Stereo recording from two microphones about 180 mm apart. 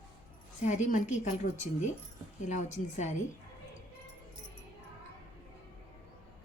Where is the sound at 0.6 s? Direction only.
40° left (ahead or behind).